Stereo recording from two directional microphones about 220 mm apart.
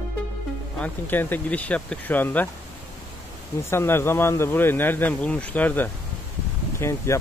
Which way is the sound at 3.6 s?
10° left (ahead or behind).